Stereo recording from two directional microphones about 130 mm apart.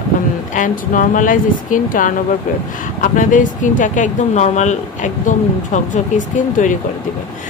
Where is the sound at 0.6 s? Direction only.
85° left.